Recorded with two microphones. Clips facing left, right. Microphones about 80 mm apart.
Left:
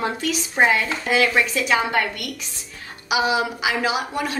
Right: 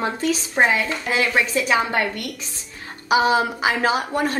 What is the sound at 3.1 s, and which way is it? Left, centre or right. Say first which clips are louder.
A woman's voice: right 3 dB; right.